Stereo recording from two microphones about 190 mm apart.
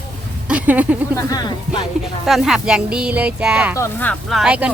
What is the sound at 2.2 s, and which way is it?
Speech, centre (ahead or behind).